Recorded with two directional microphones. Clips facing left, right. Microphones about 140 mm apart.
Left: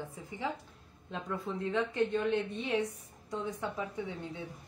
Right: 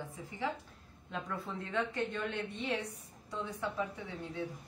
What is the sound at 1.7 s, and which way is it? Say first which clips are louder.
A woman's voice: left 5 dB; 20° left (ahead or behind).